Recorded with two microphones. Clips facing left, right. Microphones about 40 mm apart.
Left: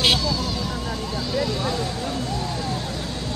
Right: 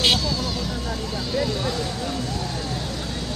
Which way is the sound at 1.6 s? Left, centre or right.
Left.